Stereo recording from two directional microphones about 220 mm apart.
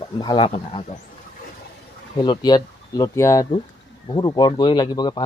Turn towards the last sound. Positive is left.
turn(degrees=20)  # may be behind; listen again after turning